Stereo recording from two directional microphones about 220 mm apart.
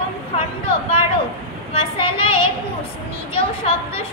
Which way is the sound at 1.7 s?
25° left (ahead or behind).